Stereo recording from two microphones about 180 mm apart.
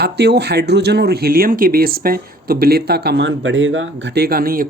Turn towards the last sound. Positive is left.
turn(degrees=-55)  # may be behind; listen again after turning